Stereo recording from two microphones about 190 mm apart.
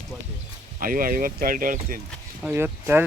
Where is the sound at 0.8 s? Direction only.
45° right (ahead or behind).